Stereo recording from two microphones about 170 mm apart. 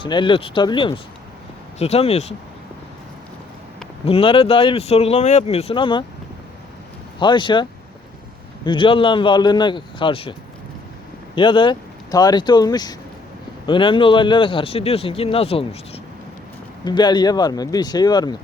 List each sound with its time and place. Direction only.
0.0 s a man's voice: 30° left (ahead or behind)
4.0 s a man's voice: 35° left (ahead or behind)
7.2 s a man's voice: 30° left (ahead or behind)
11.3 s a man's voice: 30° left (ahead or behind)